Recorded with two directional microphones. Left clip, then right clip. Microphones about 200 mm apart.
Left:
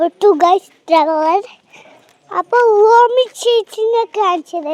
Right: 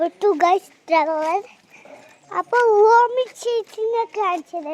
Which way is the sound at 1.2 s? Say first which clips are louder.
Left 8 dB; 40° left (ahead or behind).